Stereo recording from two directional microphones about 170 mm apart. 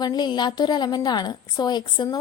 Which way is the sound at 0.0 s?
25° left (ahead or behind).